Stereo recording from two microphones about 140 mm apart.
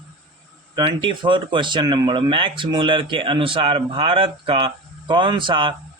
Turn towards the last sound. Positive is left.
turn(degrees=-35)  # may be behind; listen again after turning